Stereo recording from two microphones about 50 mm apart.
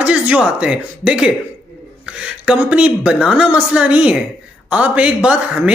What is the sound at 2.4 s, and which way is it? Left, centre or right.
Speech, right.